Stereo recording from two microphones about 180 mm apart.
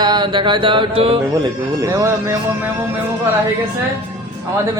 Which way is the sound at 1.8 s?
20° right (ahead or behind).